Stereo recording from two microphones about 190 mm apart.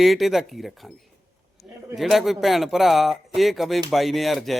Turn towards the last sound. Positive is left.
turn(degrees=0)  # may be behind; listen again after turning